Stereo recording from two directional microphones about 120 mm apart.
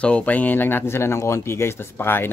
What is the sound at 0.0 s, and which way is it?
Speech, 10° left (ahead or behind).